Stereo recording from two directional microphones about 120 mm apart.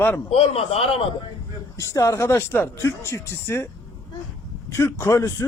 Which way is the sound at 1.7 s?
25° left (ahead or behind).